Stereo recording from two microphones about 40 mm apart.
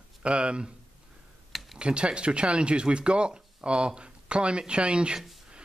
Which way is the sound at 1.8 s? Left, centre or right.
Right.